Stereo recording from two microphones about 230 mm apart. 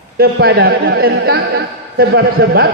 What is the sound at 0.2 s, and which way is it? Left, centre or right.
Speech, right.